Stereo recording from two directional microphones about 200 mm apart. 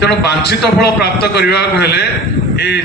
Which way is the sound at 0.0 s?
55° left (ahead or behind).